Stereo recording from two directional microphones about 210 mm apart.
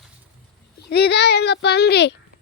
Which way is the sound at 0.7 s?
50° left (ahead or behind).